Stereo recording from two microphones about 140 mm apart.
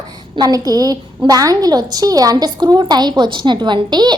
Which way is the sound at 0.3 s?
25° right (ahead or behind).